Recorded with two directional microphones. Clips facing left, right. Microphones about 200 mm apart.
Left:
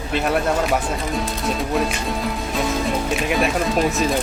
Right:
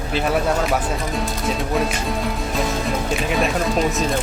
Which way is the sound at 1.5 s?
Centre (ahead or behind).